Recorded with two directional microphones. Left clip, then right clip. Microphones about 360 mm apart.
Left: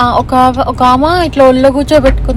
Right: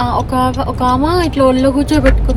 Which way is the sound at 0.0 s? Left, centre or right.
Centre.